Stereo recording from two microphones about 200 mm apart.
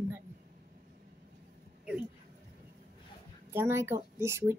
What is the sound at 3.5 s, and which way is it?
Speech, 10° right (ahead or behind).